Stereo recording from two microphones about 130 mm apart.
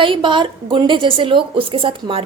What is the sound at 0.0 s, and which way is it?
A woman's voice, 40° right (ahead or behind).